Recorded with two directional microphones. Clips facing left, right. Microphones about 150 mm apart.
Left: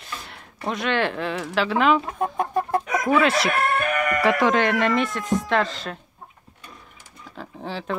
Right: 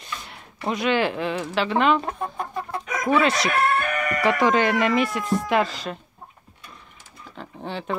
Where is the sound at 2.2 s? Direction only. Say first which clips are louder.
Left 6 dB; 45° left (ahead or behind).